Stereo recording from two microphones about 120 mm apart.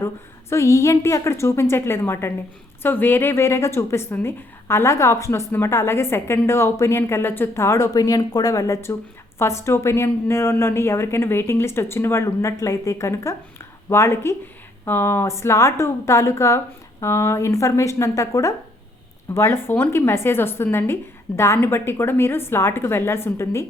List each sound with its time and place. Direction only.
0.5 s a woman's voice: 25° left (ahead or behind)